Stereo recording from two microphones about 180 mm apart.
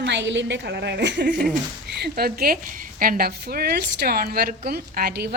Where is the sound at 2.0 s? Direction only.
60° right (ahead or behind).